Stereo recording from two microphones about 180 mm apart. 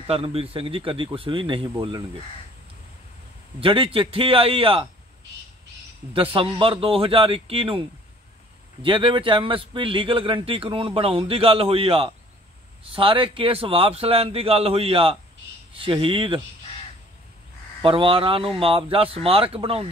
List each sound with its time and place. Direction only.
0.0 s a man's voice: 35° right (ahead or behind)
3.6 s a man's voice: 30° right (ahead or behind)
6.1 s a man's voice: 30° right (ahead or behind)
8.8 s a man's voice: 30° right (ahead or behind)
17.8 s a man's voice: 30° right (ahead or behind)